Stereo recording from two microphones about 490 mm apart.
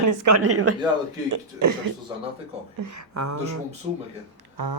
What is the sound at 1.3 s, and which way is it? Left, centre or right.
Speech, right.